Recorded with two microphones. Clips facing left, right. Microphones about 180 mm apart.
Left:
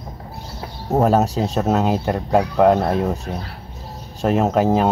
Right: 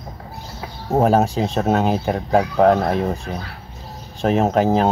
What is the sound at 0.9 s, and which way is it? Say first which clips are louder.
Speech: even; centre (ahead or behind).